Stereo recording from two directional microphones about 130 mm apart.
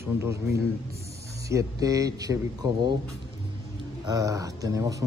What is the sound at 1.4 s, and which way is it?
Speech, 25° right (ahead or behind).